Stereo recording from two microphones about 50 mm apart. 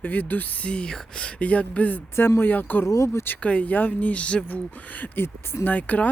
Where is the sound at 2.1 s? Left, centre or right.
Left.